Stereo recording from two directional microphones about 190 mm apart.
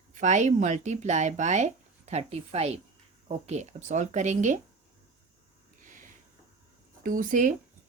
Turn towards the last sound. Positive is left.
turn(degrees=-45)  # may be behind; listen again after turning